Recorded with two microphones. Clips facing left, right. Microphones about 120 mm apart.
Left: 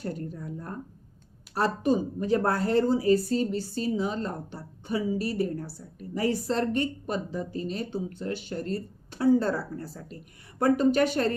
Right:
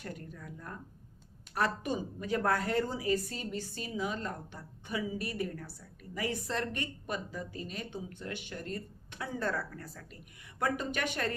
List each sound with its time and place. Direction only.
0.0 s a woman's voice: 30° left (ahead or behind)